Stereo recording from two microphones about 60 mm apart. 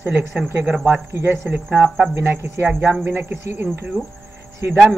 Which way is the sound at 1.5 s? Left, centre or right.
Right.